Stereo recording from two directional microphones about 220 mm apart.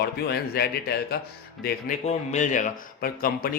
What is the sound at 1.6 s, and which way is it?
Speech, 35° left (ahead or behind).